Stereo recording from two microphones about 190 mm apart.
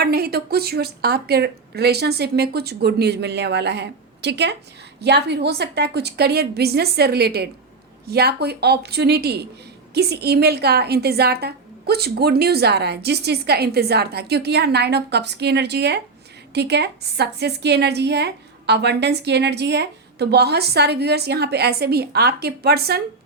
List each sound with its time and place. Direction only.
0.0 s a woman's voice: 55° right (ahead or behind)